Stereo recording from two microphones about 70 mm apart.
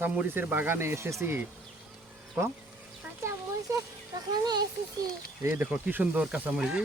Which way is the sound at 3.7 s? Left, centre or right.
Right.